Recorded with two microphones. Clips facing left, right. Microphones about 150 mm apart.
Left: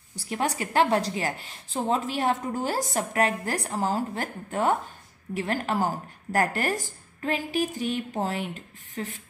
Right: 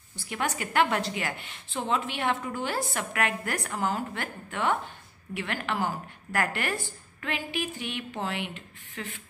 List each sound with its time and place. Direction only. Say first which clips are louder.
0.1 s a woman's voice: left 3 dB; 35° left (ahead or behind)